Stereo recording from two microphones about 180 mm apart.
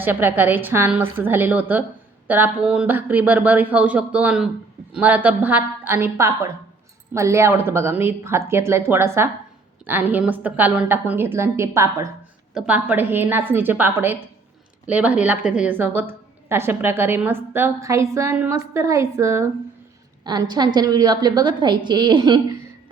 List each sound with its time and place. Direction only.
0.0 s a woman's voice: 10° right (ahead or behind)